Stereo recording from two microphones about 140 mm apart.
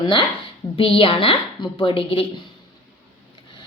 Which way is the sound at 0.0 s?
35° left (ahead or behind).